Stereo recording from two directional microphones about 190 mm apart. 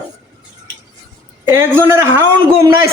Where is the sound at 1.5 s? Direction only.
10° right (ahead or behind).